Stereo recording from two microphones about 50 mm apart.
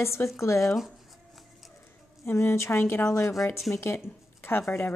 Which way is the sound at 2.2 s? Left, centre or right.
Left.